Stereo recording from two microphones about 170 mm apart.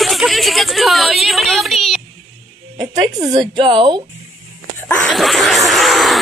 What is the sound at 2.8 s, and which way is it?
A woman's voice, 25° right (ahead or behind).